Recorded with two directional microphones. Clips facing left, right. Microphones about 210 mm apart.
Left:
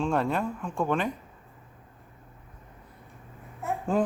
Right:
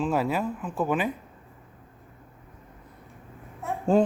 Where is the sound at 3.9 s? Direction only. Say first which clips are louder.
Right 5 dB; 30° right (ahead or behind).